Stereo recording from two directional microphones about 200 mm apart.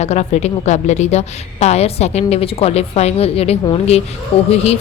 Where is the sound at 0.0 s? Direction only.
35° left (ahead or behind).